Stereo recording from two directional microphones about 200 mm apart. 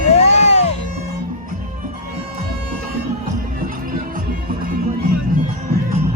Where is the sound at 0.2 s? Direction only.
35° left (ahead or behind).